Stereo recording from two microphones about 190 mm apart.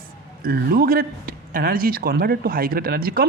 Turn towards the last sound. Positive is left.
turn(degrees=-50)  # may be behind; listen again after turning